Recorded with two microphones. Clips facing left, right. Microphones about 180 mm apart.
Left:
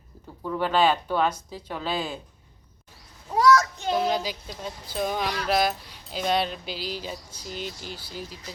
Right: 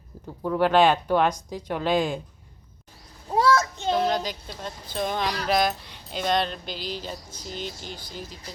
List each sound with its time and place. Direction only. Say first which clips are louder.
0.4 s speech: right 3 dB; 10° right (ahead or behind)
3.3 s child singing: left 1 dB; 30° right (ahead or behind)
3.9 s speech: even; 5° left (ahead or behind)